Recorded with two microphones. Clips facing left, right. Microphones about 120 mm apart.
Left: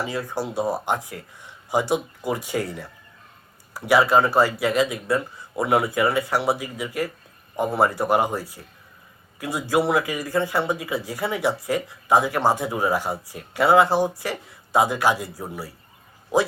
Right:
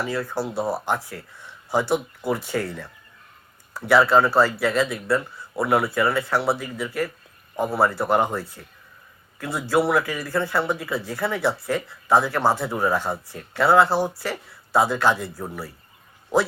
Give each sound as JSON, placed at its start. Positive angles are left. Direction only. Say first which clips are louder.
{"t": 0.0, "sound": "speech", "louder": "right 1 dB", "side_deg": 15}